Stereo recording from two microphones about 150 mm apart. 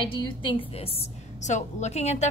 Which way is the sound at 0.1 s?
35° left (ahead or behind).